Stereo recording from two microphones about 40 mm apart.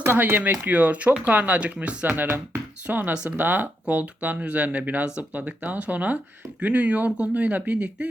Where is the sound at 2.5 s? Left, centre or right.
Right.